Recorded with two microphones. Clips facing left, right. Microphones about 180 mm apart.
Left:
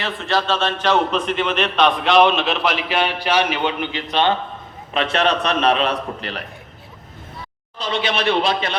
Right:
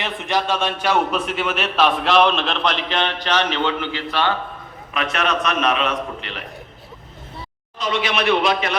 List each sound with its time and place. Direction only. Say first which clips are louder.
0.0 s a man's voice: left 1 dB; 15° right (ahead or behind); by 6.4 s 40° left (ahead or behind)
7.8 s a man's voice: even; 30° left (ahead or behind)